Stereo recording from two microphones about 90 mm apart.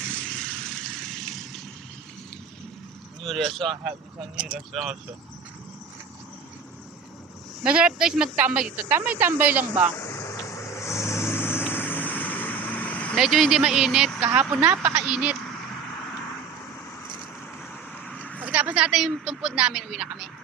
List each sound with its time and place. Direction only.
0.1 s vehicle: 10° left (ahead or behind)
3.2 s speech: centre (ahead or behind)
4.4 s speech: 10° right (ahead or behind)
7.6 s speech: 10° right (ahead or behind)
10.0 s vehicle: 35° left (ahead or behind); by 13.1 s 15° left (ahead or behind)
13.1 s speech: 5° right (ahead or behind)
18.0 s a sound: 10° left (ahead or behind)
18.4 s speech: 15° right (ahead or behind)